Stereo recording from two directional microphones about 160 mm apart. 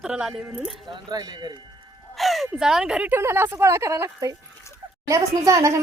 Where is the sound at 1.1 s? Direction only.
25° right (ahead or behind).